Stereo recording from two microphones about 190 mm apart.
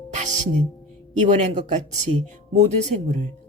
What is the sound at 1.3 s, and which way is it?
Speech, 40° right (ahead or behind).